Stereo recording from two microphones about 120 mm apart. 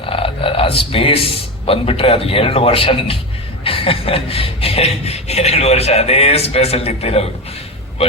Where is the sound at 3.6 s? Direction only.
50° left (ahead or behind).